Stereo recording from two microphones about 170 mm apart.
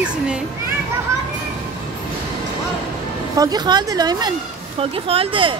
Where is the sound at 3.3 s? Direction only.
25° right (ahead or behind).